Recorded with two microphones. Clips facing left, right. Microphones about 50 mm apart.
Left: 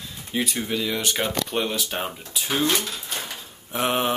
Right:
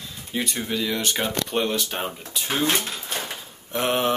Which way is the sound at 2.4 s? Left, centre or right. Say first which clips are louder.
Even; centre.